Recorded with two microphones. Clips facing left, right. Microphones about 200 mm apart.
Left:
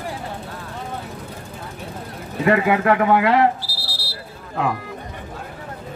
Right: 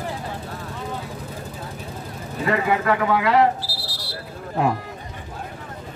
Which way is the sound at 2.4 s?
60° left (ahead or behind).